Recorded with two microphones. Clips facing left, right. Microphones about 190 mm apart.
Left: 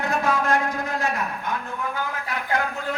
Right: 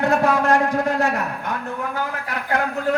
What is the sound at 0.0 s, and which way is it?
A man's voice, 70° right (ahead or behind).